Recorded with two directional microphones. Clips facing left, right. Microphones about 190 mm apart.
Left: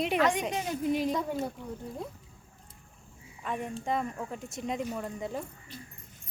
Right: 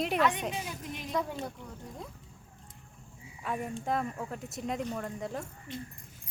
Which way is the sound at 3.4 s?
5° right (ahead or behind).